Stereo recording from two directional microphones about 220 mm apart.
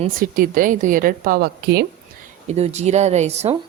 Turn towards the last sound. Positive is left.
turn(degrees=-30)  # may be behind; listen again after turning